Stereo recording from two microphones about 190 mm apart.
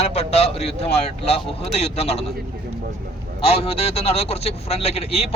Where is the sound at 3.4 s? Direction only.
30° left (ahead or behind).